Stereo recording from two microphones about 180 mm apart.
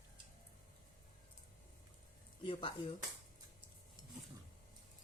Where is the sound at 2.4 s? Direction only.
30° left (ahead or behind).